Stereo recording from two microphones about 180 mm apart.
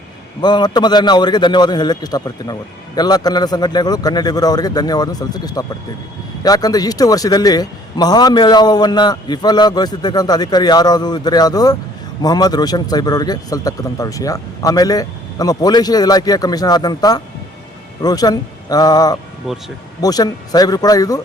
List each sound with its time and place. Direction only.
0.4 s a man's voice: 25° left (ahead or behind)